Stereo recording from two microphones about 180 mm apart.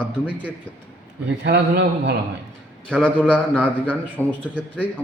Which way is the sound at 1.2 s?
70° right (ahead or behind).